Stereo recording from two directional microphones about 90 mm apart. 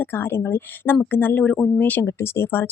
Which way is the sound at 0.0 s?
25° left (ahead or behind).